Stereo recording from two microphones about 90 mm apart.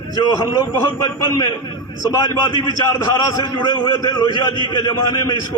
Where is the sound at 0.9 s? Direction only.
35° left (ahead or behind); by 2.8 s 50° left (ahead or behind).